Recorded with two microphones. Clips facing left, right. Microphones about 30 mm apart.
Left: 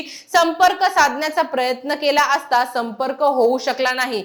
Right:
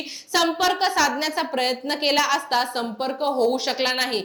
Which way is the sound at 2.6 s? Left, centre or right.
Right.